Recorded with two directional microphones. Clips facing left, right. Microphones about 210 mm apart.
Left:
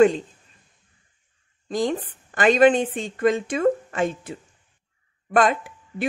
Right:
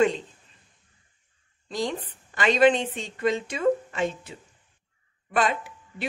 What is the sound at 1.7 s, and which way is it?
A woman's voice, 50° left (ahead or behind).